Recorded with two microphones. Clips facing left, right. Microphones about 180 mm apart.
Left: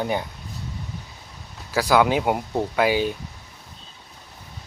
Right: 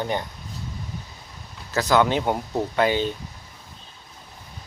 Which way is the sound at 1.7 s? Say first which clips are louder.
Left 1 dB; 10° left (ahead or behind).